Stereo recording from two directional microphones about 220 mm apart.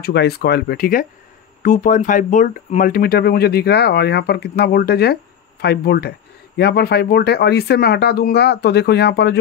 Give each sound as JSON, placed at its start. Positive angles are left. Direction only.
{"t": 0.0, "sound": "speech", "side_deg": 50}